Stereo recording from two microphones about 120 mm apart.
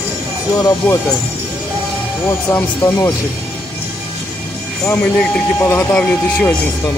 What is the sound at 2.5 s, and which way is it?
Speech, 20° left (ahead or behind).